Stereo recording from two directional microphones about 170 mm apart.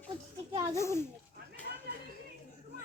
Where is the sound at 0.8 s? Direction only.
15° left (ahead or behind).